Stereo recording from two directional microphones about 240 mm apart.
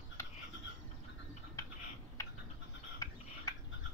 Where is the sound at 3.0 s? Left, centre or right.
Centre.